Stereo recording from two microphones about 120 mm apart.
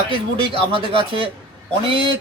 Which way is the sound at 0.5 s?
50° right (ahead or behind).